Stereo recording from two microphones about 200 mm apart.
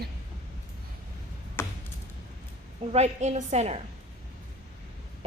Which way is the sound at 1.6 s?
10° left (ahead or behind).